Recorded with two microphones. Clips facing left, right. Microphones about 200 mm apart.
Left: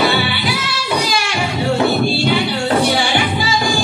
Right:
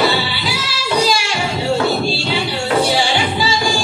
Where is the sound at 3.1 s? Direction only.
55° left (ahead or behind).